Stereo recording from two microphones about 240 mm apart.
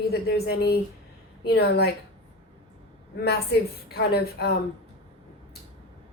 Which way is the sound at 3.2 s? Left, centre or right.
Left.